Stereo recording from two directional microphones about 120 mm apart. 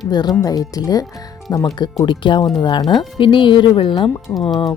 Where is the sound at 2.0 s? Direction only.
45° left (ahead or behind).